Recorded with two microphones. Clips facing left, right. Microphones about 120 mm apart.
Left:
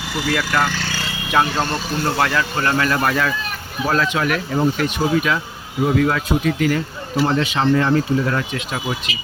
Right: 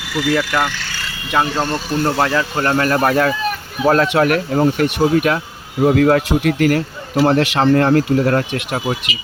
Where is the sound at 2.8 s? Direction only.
40° right (ahead or behind).